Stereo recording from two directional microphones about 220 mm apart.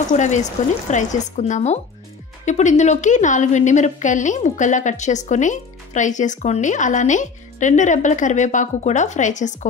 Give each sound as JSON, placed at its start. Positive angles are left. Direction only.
{"t": 0.1, "sound": "a woman's voice", "side_deg": 35}